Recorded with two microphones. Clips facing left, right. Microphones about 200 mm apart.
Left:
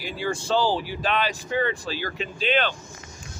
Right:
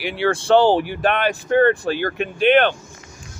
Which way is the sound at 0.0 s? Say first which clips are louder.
Right 7 dB; 75° right (ahead or behind).